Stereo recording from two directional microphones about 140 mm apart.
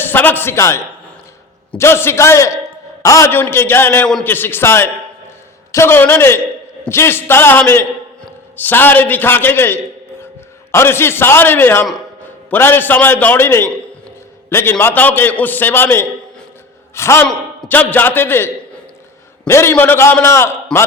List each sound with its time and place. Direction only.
0.0 s a man's voice: 15° left (ahead or behind)
1.8 s a man's voice: 15° left (ahead or behind)
20.7 s speech: 5° left (ahead or behind)